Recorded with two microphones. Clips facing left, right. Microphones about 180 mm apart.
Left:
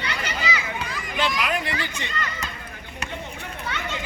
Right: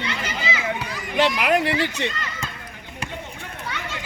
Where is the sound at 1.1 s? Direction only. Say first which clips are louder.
Right 6 dB; 70° right (ahead or behind).